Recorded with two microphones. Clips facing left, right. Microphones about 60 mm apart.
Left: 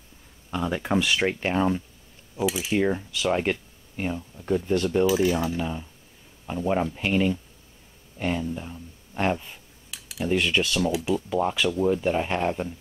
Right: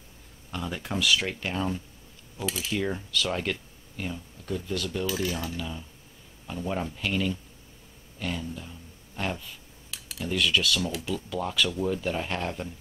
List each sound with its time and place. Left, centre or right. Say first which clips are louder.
0.5 s speech: left 7 dB; centre
2.3 s speech: left 6 dB; centre; by 5.0 s left
5.0 s speech: left 8 dB; left
9.8 s a sound: left 4 dB; centre
10.2 s speech: left 3 dB; left